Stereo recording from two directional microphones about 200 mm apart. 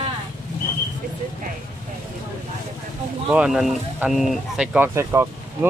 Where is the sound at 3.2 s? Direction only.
5° right (ahead or behind).